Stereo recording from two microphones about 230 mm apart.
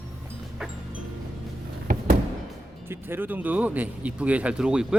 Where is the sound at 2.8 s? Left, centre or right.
Centre.